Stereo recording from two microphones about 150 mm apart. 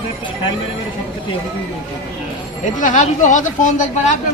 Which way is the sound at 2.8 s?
55° left (ahead or behind).